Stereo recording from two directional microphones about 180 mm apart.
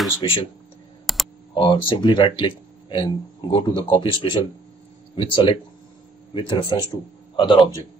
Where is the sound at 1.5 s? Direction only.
30° left (ahead or behind).